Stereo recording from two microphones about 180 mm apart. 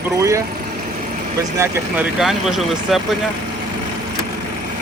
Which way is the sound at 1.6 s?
15° right (ahead or behind).